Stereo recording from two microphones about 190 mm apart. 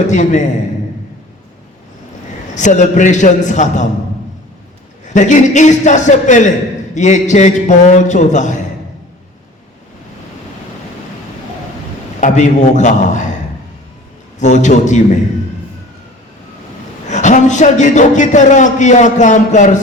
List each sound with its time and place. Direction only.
0.1 s a man's voice: 40° left (ahead or behind)
2.6 s a man's voice: 40° left (ahead or behind)
5.0 s a man's voice: 40° left (ahead or behind)
12.2 s a man's voice: 40° left (ahead or behind)
14.3 s a man's voice: 40° left (ahead or behind)
17.1 s a man's voice: 40° left (ahead or behind)